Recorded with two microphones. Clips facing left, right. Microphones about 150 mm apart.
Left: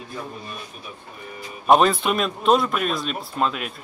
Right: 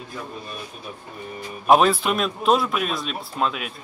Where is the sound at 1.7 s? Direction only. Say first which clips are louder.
Even; centre (ahead or behind).